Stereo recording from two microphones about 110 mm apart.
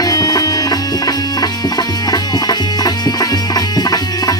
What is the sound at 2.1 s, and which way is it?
Music, 35° left (ahead or behind).